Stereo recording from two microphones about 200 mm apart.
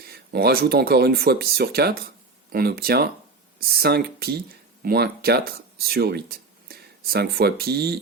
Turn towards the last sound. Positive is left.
turn(degrees=-55)  # may be behind; listen again after turning